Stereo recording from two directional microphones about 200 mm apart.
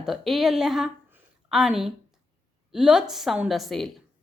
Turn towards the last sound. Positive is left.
turn(degrees=0)  # may be behind; listen again after turning